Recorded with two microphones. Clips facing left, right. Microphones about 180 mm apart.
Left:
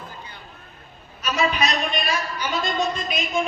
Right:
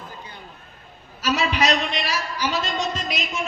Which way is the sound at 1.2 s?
80° right.